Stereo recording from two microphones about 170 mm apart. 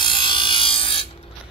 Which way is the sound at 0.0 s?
30° left (ahead or behind).